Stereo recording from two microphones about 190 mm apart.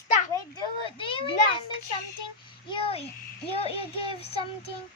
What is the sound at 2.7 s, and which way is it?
Speech, 30° left (ahead or behind).